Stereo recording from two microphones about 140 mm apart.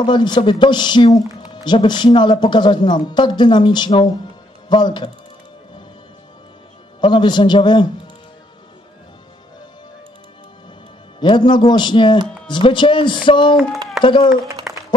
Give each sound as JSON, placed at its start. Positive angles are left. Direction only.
{"t": 0.0, "sound": "speech", "side_deg": 35}
{"t": 7.0, "sound": "speech", "side_deg": 35}
{"t": 11.1, "sound": "speech", "side_deg": 30}
{"t": 14.7, "sound": "a sound", "side_deg": -5}